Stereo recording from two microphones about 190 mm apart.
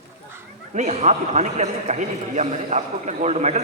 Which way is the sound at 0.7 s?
35° right (ahead or behind).